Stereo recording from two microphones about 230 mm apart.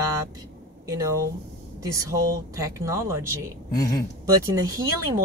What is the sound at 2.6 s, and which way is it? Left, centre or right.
Speech, centre.